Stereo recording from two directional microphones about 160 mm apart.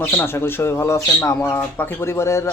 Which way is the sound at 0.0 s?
15° left (ahead or behind).